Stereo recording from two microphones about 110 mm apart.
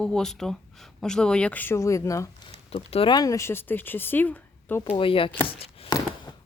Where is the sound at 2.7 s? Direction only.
65° left (ahead or behind).